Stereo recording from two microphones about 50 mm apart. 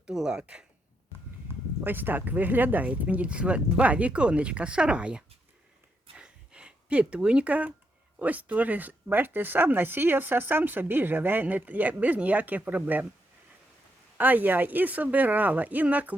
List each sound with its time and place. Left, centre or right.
0.0 s speech: centre
1.8 s speech: right
6.1 s a sound: centre
8.2 s speech: right
14.2 s speech: right